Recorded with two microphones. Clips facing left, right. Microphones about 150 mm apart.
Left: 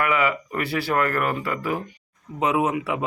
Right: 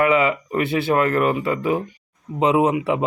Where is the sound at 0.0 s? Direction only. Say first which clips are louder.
Right 5 dB; 25° right (ahead or behind).